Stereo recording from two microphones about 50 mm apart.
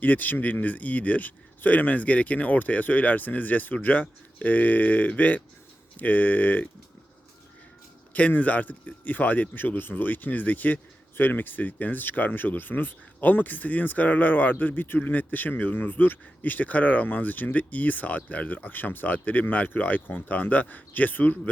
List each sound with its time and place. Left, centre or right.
0.0 s speech: left
8.1 s speech: left